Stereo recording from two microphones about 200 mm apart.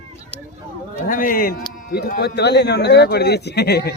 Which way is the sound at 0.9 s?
45° left (ahead or behind).